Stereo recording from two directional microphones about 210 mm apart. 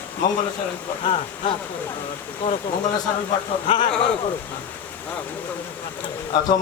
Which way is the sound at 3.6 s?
25° left (ahead or behind).